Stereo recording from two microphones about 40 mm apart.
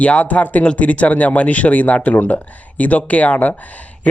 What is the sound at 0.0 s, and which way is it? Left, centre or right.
Speech, left.